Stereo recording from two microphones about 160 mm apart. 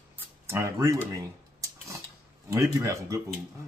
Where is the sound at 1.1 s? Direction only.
20° right (ahead or behind).